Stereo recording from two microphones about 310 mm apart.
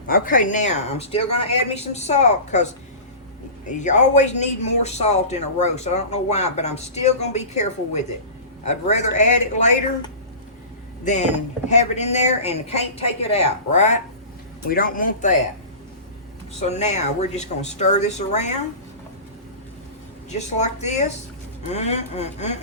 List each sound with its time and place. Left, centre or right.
0.1 s speech: left
3.8 s speech: left
16.6 s speech: left
20.3 s speech: left